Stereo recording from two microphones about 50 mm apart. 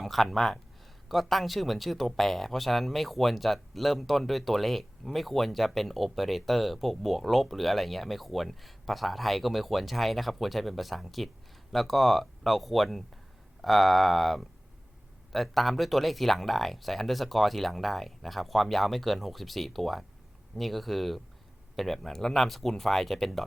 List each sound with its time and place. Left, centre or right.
0.0 s speech: centre